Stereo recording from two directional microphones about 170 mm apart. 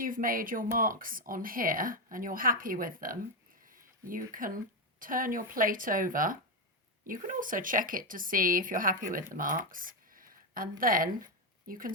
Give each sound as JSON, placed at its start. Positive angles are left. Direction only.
{"t": 0.0, "sound": "speech", "side_deg": -55}